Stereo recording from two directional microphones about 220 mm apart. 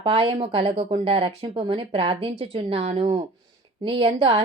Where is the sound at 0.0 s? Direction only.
25° right (ahead or behind).